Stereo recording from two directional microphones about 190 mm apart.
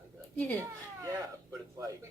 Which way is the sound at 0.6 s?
15° right (ahead or behind).